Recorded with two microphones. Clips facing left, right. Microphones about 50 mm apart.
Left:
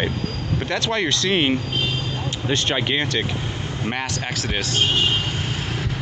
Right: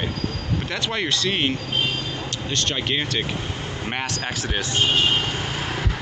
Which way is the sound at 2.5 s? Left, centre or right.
Left.